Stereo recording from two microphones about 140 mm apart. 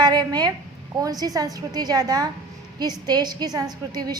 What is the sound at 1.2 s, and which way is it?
A woman's voice, 25° right (ahead or behind).